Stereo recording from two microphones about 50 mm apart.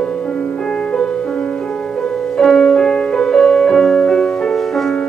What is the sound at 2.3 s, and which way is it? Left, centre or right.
Music, centre.